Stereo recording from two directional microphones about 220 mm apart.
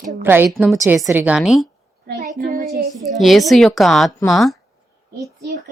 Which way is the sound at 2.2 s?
35° right (ahead or behind).